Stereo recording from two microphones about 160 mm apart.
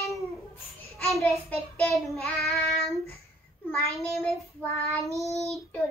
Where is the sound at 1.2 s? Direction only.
10° left (ahead or behind).